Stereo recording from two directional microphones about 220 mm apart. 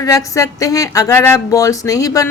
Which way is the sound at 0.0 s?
15° left (ahead or behind).